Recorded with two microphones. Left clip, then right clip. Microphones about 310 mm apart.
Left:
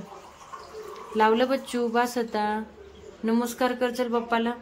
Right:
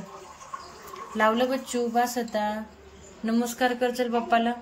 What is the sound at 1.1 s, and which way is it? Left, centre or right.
A woman's voice, centre.